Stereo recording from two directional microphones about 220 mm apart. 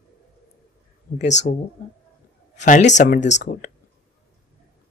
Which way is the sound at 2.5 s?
35° left (ahead or behind).